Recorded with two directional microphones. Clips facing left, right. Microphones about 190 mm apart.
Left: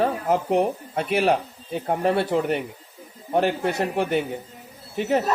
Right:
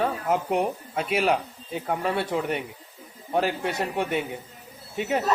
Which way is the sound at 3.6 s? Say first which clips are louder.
Left 4 dB; 35° left (ahead or behind).